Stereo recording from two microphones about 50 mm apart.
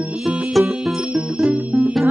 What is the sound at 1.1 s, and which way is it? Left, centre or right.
Music, right.